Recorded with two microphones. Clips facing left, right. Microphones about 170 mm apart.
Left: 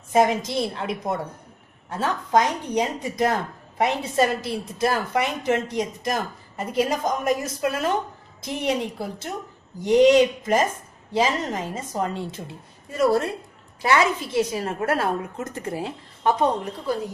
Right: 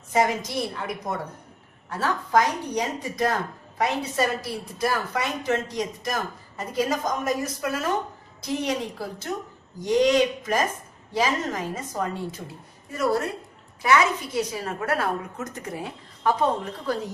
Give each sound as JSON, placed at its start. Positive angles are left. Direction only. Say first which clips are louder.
{"t": 0.1, "sound": "speech", "louder": "left 4 dB", "side_deg": 20}